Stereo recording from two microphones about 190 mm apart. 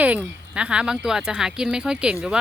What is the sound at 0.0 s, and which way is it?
Speech, 10° right (ahead or behind).